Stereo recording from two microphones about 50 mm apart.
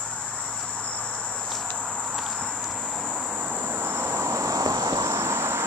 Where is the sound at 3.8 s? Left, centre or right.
Right.